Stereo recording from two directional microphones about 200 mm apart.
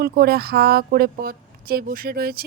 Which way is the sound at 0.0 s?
50° right (ahead or behind).